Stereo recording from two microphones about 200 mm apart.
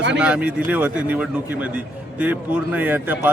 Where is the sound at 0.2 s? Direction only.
5° right (ahead or behind).